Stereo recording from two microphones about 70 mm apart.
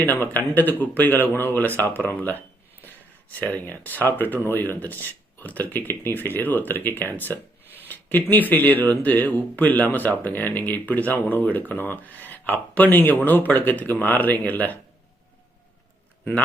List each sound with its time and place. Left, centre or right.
0.1 s speech: left